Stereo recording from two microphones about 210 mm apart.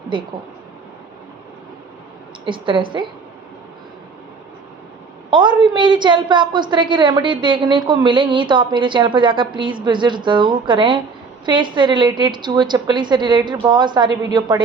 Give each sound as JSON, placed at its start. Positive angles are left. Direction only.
{"t": 2.4, "sound": "a woman's voice", "side_deg": -25}
{"t": 5.3, "sound": "a woman's voice", "side_deg": -20}